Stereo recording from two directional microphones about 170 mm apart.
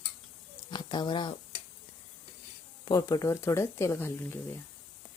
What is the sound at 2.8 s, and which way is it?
Speech, 25° left (ahead or behind).